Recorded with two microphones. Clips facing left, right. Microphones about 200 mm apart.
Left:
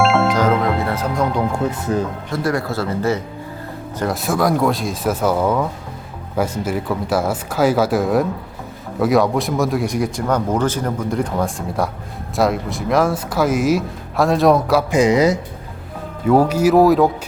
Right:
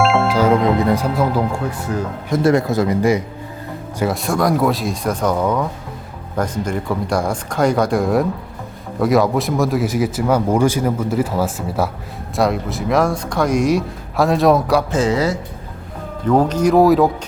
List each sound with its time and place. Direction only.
0.0 s music: centre (ahead or behind)
0.6 s speech: 15° right (ahead or behind)
1.9 s speech: 20° left (ahead or behind)
2.3 s speech: 20° right (ahead or behind)
3.9 s speech: centre (ahead or behind)
14.8 s speech: 15° left (ahead or behind)